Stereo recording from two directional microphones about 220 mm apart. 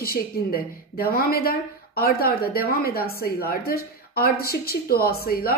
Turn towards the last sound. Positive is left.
turn(degrees=45)  # may be behind; listen again after turning